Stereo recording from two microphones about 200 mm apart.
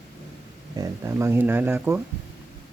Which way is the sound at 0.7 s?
15° right (ahead or behind).